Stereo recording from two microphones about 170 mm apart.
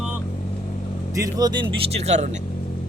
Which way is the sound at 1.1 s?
20° right (ahead or behind).